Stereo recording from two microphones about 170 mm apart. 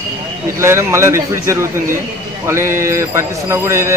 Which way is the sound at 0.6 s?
15° right (ahead or behind).